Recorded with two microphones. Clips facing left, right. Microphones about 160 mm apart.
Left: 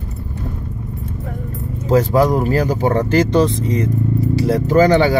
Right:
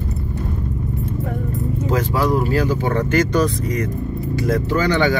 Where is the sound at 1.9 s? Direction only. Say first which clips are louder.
Left 6 dB; 35° left (ahead or behind).